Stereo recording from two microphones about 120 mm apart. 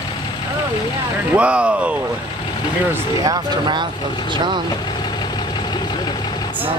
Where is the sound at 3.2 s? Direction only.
35° right (ahead or behind).